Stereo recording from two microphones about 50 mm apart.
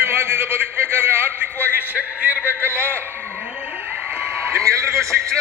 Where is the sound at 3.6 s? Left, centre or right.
Right.